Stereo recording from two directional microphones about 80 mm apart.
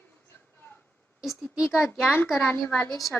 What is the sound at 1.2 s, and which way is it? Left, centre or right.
Speech, centre.